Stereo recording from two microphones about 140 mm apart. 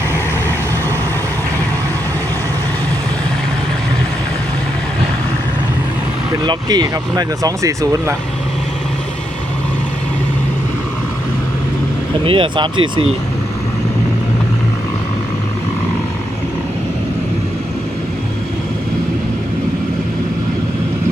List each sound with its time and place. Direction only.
6.4 s speech: 30° right (ahead or behind)
12.2 s speech: 40° right (ahead or behind)